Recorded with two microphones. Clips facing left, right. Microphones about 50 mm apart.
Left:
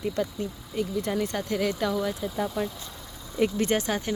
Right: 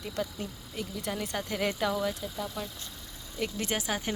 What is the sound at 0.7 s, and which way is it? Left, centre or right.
A woman's voice, centre.